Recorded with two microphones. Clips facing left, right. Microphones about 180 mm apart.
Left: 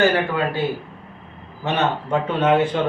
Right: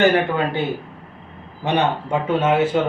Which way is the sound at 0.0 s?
20° right (ahead or behind).